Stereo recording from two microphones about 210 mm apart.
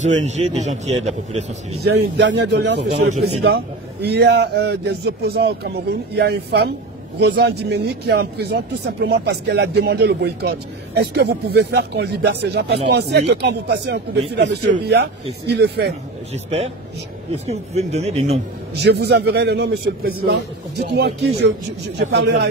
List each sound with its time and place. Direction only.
0.0 s speech: 35° right (ahead or behind)
1.9 s speech: 55° right (ahead or behind)
16.4 s a man's voice: 30° right (ahead or behind)
18.8 s speech: 50° right (ahead or behind)